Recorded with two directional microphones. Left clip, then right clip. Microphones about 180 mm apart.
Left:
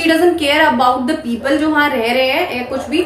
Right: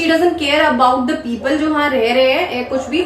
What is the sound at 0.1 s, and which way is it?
A woman's voice, 20° left (ahead or behind).